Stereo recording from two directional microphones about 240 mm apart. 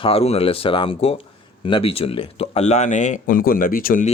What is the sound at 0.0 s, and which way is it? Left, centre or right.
Speech, left.